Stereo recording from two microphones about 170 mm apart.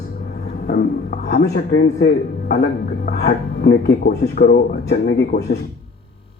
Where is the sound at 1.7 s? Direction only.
70° left (ahead or behind).